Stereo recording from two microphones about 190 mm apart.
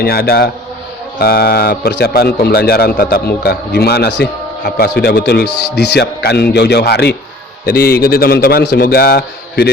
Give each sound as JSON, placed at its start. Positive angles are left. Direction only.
{"t": 0.0, "sound": "a man's voice", "side_deg": 55}